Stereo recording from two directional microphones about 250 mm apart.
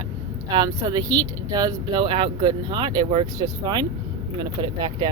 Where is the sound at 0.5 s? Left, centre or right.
Centre.